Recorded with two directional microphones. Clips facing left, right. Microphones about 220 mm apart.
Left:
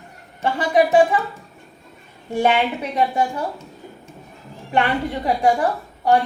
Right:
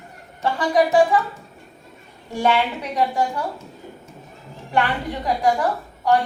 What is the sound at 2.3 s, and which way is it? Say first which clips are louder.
Speech: left 2 dB; 20° left (ahead or behind).